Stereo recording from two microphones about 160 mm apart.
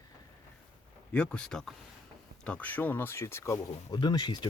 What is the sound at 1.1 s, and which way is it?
Speech, 5° left (ahead or behind).